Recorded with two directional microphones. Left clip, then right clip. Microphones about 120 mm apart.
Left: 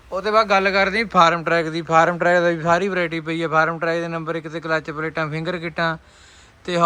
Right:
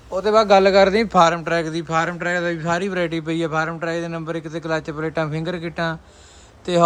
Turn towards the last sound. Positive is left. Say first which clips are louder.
# right 3 dB
turn(degrees=-30)  # may be behind; listen again after turning